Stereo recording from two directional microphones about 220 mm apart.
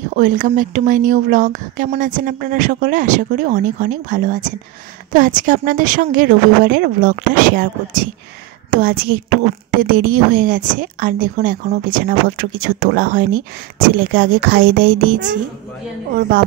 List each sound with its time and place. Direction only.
0.1 s speech: 35° right (ahead or behind)